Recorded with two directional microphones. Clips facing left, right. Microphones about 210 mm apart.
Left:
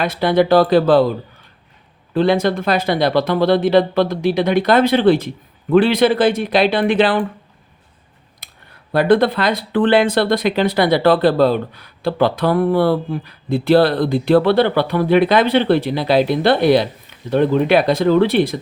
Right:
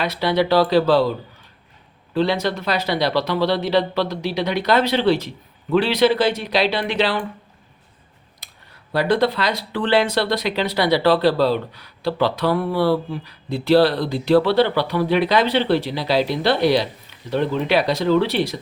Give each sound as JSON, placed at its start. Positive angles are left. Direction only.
{"t": 0.0, "sound": "speech", "side_deg": 50}
{"t": 2.1, "sound": "speech", "side_deg": 50}
{"t": 8.4, "sound": "a sound", "side_deg": 55}
{"t": 8.9, "sound": "speech", "side_deg": 55}